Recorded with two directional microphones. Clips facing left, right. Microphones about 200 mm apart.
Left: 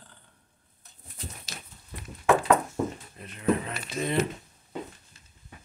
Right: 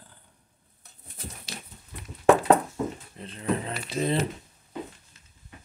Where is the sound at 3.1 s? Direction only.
30° right (ahead or behind).